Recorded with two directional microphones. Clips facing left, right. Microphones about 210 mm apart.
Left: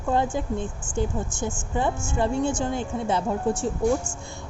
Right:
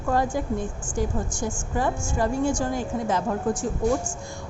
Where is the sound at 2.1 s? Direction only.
25° left (ahead or behind).